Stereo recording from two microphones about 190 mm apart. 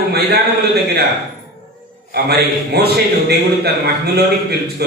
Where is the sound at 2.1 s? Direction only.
55° right (ahead or behind).